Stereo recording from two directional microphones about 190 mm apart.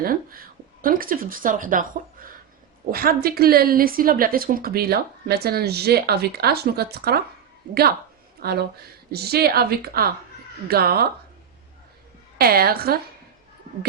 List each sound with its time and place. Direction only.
0.0 s a woman's voice: 50° right (ahead or behind)
2.9 s a woman's voice: 50° right (ahead or behind)
12.4 s a woman's voice: 50° right (ahead or behind)